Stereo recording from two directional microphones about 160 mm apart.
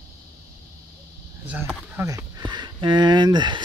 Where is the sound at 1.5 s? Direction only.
10° right (ahead or behind).